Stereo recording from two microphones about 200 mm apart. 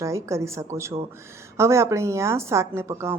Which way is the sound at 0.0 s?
15° right (ahead or behind).